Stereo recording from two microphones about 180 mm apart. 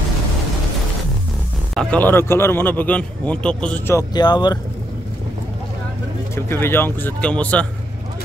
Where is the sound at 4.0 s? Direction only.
25° left (ahead or behind).